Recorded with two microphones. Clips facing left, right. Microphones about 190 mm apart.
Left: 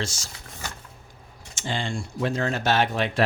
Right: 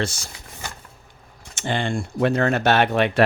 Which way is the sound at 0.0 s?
60° right (ahead or behind).